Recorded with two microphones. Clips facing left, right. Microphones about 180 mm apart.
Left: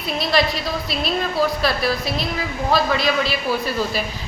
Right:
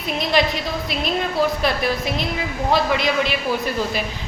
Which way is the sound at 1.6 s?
15° right (ahead or behind).